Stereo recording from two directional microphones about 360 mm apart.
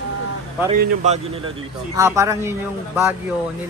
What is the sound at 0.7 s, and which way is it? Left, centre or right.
A man's voice, centre.